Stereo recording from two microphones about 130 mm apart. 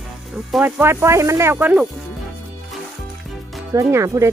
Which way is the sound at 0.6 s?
20° right (ahead or behind).